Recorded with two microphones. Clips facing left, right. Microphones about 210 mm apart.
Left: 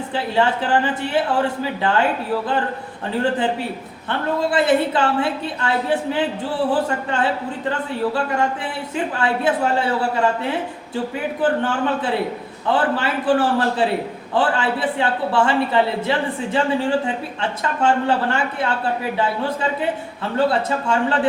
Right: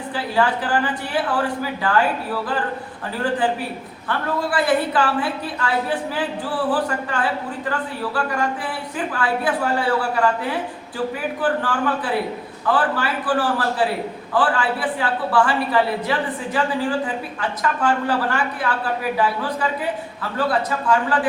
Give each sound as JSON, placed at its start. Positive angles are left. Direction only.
{"t": 0.3, "sound": "a woman's voice", "side_deg": 25}
{"t": 4.1, "sound": "a woman's voice", "side_deg": 25}